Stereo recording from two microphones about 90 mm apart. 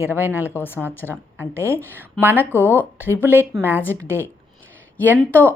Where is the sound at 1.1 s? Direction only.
25° right (ahead or behind).